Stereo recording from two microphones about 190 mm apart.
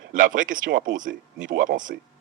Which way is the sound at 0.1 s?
45° right (ahead or behind).